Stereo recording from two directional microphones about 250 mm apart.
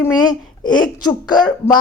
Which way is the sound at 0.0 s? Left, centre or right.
Centre.